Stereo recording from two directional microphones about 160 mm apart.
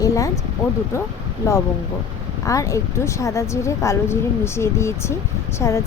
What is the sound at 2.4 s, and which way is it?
Speech, 20° left (ahead or behind).